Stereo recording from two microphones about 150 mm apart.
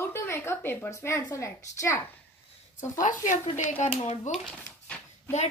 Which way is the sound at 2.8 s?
60° left (ahead or behind).